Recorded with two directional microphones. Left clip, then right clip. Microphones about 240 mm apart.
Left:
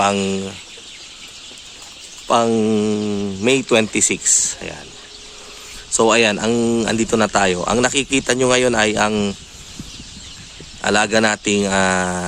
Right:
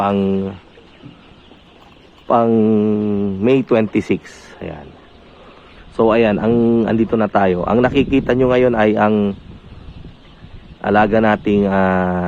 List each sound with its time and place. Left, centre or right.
0.0 s speech: centre
2.2 s speech: centre
6.0 s speech: centre
10.8 s speech: centre